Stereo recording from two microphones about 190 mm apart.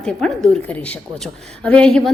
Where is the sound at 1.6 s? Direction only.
5° left (ahead or behind).